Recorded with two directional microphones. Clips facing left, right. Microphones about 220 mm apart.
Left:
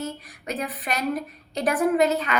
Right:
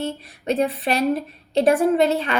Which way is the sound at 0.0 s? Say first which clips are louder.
Right 5 dB; 25° right (ahead or behind).